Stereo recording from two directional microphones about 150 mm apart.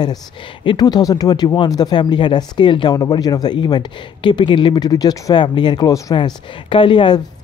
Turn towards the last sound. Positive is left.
turn(degrees=35)  # may be behind; listen again after turning